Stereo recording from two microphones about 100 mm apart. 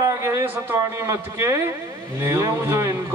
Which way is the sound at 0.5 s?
25° right (ahead or behind).